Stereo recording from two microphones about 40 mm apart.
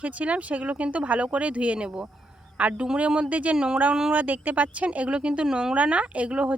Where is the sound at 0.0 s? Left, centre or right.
Right.